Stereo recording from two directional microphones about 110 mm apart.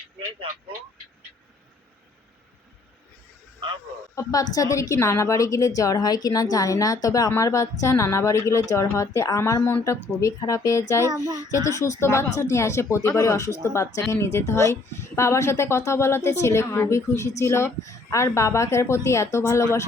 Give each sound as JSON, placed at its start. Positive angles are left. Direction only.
{"t": 4.1, "sound": "speech", "side_deg": 35}